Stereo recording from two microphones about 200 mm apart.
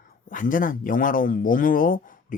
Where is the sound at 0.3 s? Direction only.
40° left (ahead or behind).